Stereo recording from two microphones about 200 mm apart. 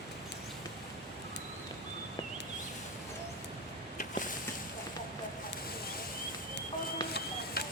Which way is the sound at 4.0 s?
40° left (ahead or behind).